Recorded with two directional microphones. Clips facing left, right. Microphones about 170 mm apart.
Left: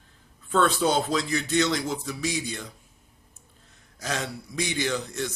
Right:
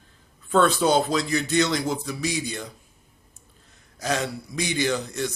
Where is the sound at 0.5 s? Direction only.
40° right (ahead or behind).